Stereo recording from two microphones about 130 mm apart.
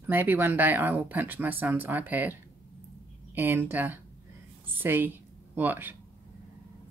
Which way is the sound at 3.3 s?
15° right (ahead or behind).